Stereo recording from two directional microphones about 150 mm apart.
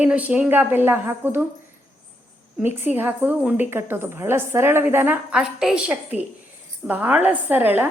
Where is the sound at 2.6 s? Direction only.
15° right (ahead or behind).